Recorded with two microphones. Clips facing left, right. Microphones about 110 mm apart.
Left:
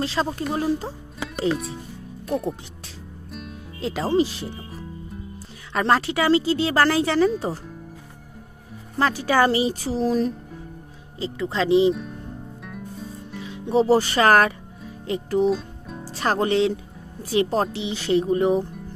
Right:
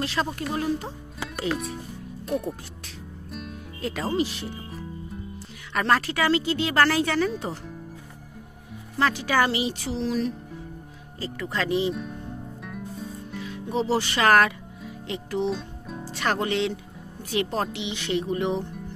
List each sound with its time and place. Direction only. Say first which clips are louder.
0.0 s speech: left 3 dB; 30° left (ahead or behind)
1.5 s speech: even; centre (ahead or behind)
3.3 s music: even; centre (ahead or behind)
3.8 s speech: left 5 dB; 30° left (ahead or behind)
4.5 s music: left 1 dB; centre (ahead or behind)
5.8 s speech: left 3 dB; 25° left (ahead or behind)
8.9 s speech: left 3 dB; 35° left (ahead or behind)
11.1 s speech: left 5 dB; 20° left (ahead or behind)
11.9 s speech: left 5 dB; centre (ahead or behind)
12.6 s music: even; centre (ahead or behind)
13.4 s speech: left 7 dB; 30° left (ahead or behind)
15.0 s music: left 6 dB; 40° left (ahead or behind)
15.5 s music: left 4 dB; centre (ahead or behind)
16.1 s speech: left 4 dB; 35° left (ahead or behind)